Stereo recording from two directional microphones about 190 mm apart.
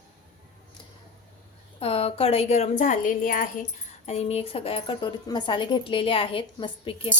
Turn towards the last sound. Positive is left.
turn(degrees=25)  # may be behind; listen again after turning